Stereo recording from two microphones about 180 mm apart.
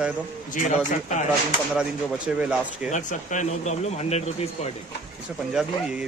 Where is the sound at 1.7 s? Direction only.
5° right (ahead or behind).